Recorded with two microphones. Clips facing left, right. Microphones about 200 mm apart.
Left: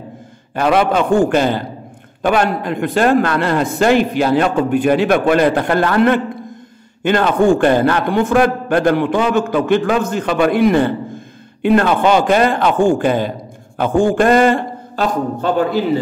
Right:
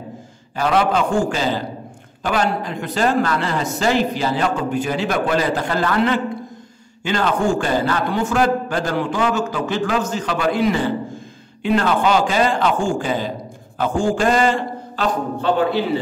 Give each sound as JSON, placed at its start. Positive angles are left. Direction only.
{"t": 0.6, "sound": "a man's voice", "side_deg": 60}